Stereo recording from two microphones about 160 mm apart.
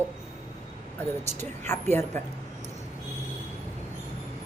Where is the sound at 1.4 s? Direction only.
15° left (ahead or behind).